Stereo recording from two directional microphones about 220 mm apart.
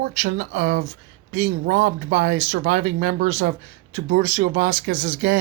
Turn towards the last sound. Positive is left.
turn(degrees=-45)  # may be behind; listen again after turning